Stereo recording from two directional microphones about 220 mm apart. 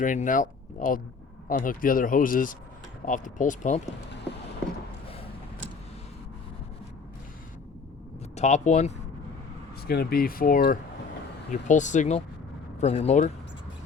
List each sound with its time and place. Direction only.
0.0 s speech: 35° left (ahead or behind)
8.4 s speech: 30° left (ahead or behind)
9.8 s speech: 45° left (ahead or behind)